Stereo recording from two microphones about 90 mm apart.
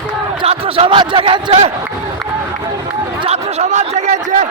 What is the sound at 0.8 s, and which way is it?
Speech, 80° right.